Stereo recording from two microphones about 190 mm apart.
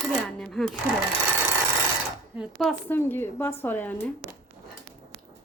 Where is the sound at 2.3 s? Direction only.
Centre (ahead or behind).